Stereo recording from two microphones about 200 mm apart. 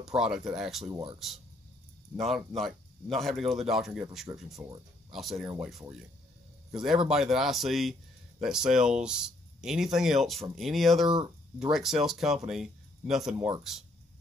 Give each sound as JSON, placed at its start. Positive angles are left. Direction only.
{"t": 0.0, "sound": "speech", "side_deg": -5}
{"t": 0.8, "sound": "speech", "side_deg": -20}
{"t": 2.1, "sound": "speech", "side_deg": 0}